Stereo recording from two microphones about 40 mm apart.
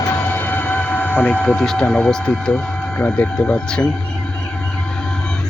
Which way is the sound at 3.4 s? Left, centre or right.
Left.